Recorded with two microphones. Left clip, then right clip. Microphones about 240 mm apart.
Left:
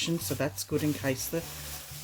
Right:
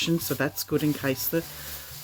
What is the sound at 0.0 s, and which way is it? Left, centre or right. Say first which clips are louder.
Speech: right 4 dB; right.